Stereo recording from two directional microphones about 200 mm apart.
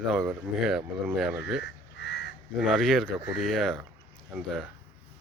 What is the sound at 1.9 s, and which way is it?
Crow, 60° left (ahead or behind).